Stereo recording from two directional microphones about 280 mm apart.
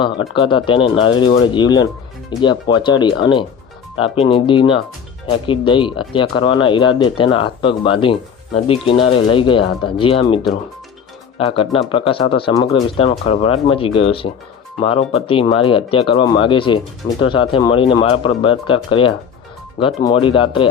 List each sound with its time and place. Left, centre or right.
0.3 s speech: centre